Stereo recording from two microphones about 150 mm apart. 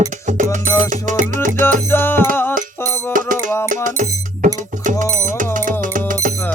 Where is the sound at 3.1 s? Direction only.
65° right (ahead or behind).